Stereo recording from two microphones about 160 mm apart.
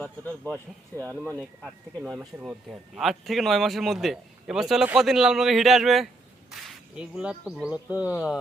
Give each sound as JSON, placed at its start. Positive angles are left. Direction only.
{"t": 0.0, "sound": "speech", "side_deg": 10}
{"t": 0.9, "sound": "speech", "side_deg": -15}
{"t": 1.6, "sound": "speech", "side_deg": -5}